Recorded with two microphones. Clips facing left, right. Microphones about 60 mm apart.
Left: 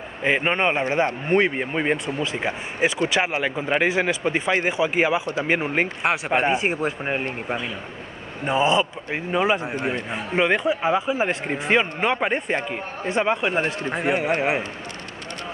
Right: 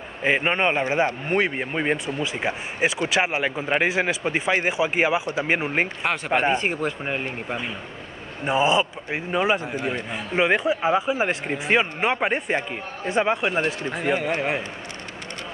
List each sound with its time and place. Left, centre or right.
0.2 s a man's voice: centre
2.4 s speech: centre
6.0 s speech: centre
8.5 s a man's voice: centre
13.8 s a man's voice: left